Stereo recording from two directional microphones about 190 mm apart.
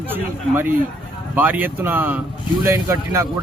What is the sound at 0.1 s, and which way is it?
Speech, 10° right (ahead or behind).